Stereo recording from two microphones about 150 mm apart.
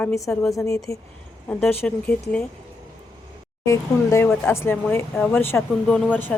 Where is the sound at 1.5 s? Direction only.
10° left (ahead or behind).